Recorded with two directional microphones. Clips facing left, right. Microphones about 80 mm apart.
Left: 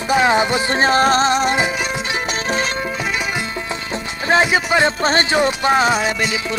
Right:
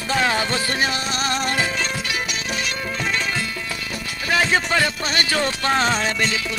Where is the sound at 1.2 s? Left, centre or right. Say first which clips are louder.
Left 6 dB; left.